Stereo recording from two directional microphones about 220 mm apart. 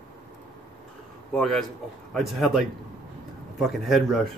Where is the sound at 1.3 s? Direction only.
Centre (ahead or behind).